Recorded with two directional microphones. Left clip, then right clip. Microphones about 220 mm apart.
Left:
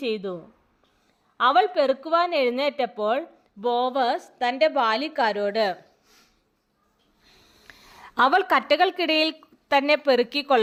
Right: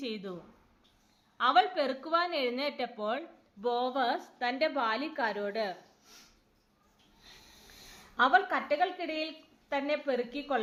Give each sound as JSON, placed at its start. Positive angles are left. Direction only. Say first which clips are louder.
{"t": 0.0, "sound": "a woman's voice", "louder": "left 11 dB", "side_deg": 40}
{"t": 1.4, "sound": "a woman's voice", "louder": "left 7 dB", "side_deg": 40}
{"t": 8.1, "sound": "a woman's voice", "louder": "left 7 dB", "side_deg": 50}